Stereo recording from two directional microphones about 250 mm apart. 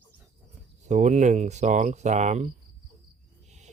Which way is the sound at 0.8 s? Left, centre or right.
Right.